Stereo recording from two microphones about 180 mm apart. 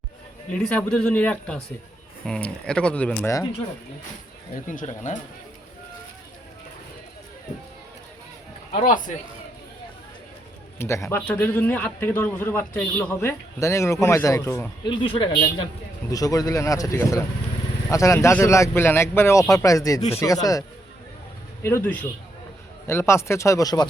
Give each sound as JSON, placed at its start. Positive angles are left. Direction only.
{"t": 0.5, "sound": "a man's voice", "side_deg": 5}
{"t": 4.5, "sound": "speech", "side_deg": 45}
{"t": 8.7, "sound": "speech", "side_deg": 45}
{"t": 10.8, "sound": "a man's voice", "side_deg": 15}
{"t": 14.8, "sound": "a man's voice", "side_deg": 30}